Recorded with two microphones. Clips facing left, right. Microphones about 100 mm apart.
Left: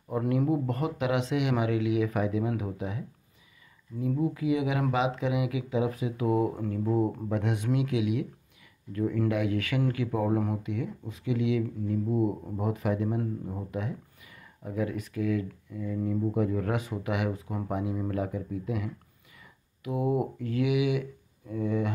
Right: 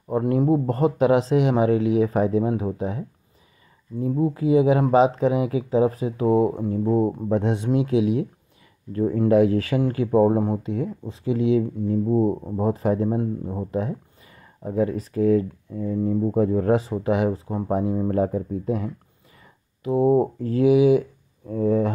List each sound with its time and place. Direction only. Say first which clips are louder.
0.1 s speech: right 7 dB; 30° right (ahead or behind)